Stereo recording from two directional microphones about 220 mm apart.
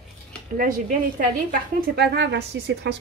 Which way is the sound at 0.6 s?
40° right (ahead or behind).